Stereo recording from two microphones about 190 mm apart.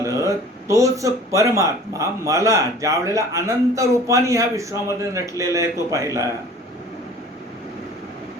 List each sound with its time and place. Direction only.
0.0 s speech: 15° right (ahead or behind)